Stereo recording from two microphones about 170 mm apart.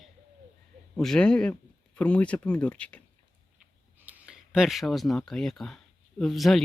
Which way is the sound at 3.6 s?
5° right (ahead or behind).